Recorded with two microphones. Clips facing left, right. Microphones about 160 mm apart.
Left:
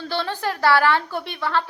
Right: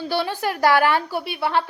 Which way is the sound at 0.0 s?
10° right (ahead or behind).